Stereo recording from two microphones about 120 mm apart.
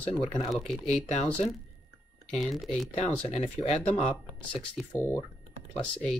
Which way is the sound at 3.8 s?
55° left (ahead or behind).